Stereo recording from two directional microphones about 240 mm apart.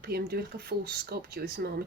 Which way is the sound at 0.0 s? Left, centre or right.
Right.